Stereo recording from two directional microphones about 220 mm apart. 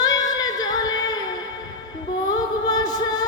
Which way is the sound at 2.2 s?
15° left (ahead or behind).